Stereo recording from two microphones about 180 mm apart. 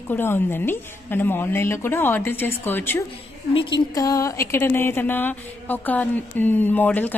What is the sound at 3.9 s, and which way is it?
A woman's voice, 20° left (ahead or behind).